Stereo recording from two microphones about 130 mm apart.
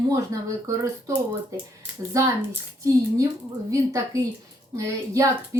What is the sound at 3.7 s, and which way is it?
A woman's voice, 25° right (ahead or behind).